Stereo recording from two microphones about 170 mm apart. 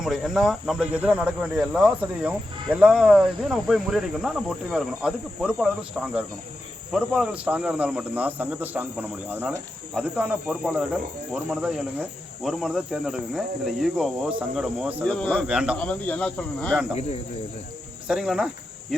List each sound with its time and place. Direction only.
0.0 s speech: centre (ahead or behind)
6.9 s speech: 5° right (ahead or behind)
15.0 s speech: 5° left (ahead or behind)
15.4 s speech: 5° right (ahead or behind)
15.8 s speech: 5° left (ahead or behind)
16.9 s speech: 40° left (ahead or behind)
18.1 s speech: 5° right (ahead or behind)